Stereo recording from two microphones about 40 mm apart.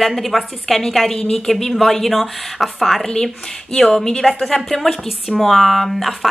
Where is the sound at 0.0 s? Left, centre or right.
Centre.